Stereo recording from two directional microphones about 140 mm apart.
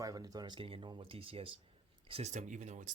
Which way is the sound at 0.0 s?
25° right (ahead or behind).